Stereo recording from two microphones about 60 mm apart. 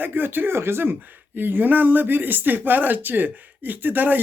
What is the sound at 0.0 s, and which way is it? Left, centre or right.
Speech, right.